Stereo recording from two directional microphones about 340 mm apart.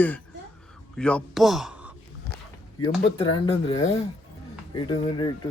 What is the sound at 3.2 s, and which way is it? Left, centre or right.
Speech, centre.